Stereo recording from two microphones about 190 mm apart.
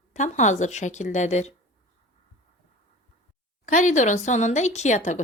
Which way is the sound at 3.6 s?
40° left (ahead or behind).